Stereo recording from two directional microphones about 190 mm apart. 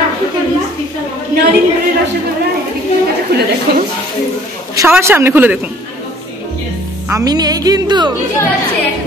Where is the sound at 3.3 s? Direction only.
55° right (ahead or behind).